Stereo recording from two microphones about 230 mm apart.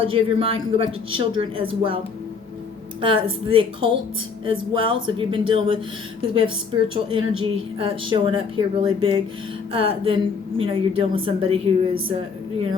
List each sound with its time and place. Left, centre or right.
0.0 s a woman's voice: right
3.0 s a woman's voice: right